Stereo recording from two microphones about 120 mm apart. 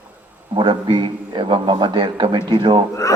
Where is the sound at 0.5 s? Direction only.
40° right (ahead or behind).